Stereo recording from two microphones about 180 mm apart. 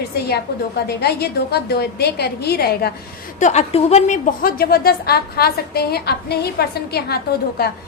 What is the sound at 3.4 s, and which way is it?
A woman's voice, 40° left (ahead or behind).